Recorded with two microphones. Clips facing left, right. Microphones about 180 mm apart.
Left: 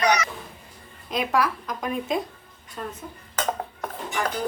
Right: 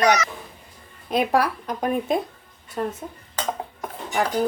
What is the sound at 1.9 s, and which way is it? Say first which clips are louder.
A child's voice: right 3 dB; 50° right (ahead or behind).